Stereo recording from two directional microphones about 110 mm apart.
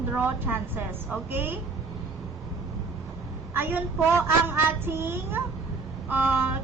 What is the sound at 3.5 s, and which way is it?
A woman's voice, 20° right (ahead or behind).